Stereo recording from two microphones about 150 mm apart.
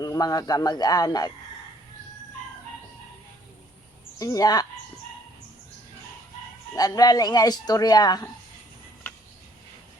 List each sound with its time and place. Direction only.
0.0 s speech: 25° left (ahead or behind)
4.2 s speech: 25° left (ahead or behind)
6.7 s speech: 25° left (ahead or behind)